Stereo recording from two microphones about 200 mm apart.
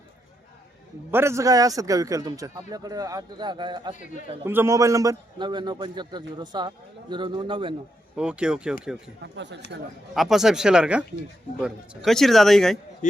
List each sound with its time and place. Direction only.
1.1 s a man's voice: 15° right (ahead or behind)
4.4 s a man's voice: 10° right (ahead or behind)
8.1 s a man's voice: 5° right (ahead or behind)
9.2 s speech: 60° right (ahead or behind)
10.2 s a man's voice: centre (ahead or behind)